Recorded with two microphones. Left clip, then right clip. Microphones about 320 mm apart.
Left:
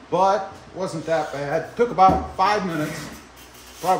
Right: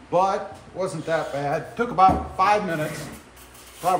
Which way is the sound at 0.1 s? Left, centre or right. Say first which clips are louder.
Left 2 dB; centre.